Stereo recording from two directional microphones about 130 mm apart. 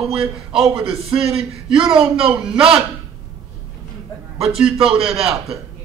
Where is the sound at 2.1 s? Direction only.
45° right (ahead or behind).